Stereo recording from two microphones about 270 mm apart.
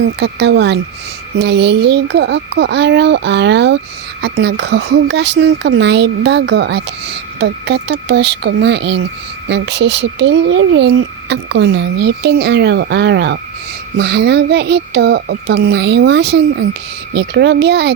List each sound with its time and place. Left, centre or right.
0.2 s speech: right